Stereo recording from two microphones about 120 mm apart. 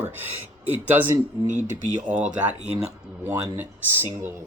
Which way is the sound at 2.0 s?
10° right (ahead or behind).